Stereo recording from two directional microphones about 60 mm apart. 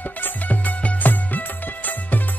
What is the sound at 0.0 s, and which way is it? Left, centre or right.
Music, left.